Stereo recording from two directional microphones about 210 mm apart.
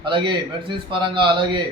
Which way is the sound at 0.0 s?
20° right (ahead or behind).